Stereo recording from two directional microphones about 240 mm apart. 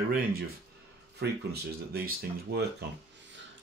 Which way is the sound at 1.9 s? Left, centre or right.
Right.